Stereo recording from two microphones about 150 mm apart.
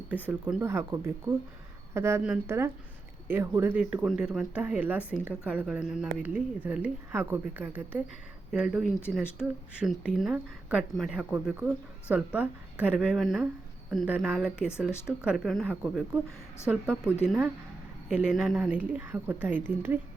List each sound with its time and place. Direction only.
0.3 s a woman's voice: 10° right (ahead or behind)
15.7 s a woman's voice: 10° right (ahead or behind)
17.2 s a woman's voice: 10° right (ahead or behind)